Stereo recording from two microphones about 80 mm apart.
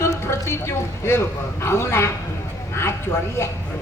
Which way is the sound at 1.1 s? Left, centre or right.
Left.